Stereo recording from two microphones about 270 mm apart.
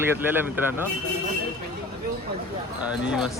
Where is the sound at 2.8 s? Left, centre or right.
Centre.